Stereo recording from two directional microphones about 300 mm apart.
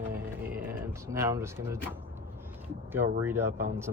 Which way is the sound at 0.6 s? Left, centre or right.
Centre.